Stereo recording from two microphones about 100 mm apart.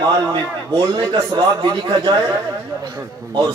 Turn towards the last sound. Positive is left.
turn(degrees=-45)  # may be behind; listen again after turning